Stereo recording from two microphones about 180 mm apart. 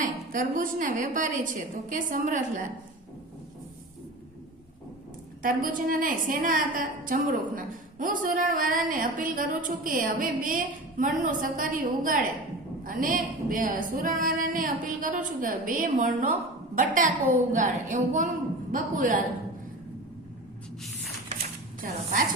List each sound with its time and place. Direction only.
0.0 s a woman's voice: 45° right (ahead or behind)
5.4 s a woman's voice: 50° right (ahead or behind)
21.8 s a woman's voice: 45° right (ahead or behind)